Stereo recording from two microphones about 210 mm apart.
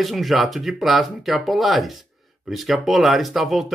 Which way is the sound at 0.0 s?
Centre (ahead or behind).